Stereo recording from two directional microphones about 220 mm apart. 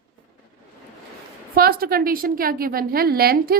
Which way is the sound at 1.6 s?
45° right (ahead or behind).